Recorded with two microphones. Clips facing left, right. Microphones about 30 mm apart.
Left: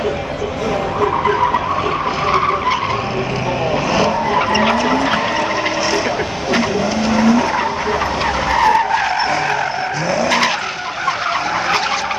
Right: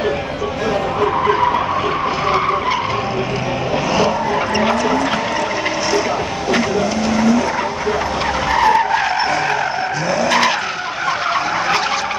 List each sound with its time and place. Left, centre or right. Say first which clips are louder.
1.2 s vehicle: even; centre
4.3 s vehicle: left 2 dB; left
7.1 s vehicle: left 2 dB; centre
8.5 s skidding: even; centre